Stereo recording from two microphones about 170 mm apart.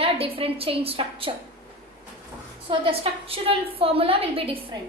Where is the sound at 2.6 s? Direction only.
30° right (ahead or behind).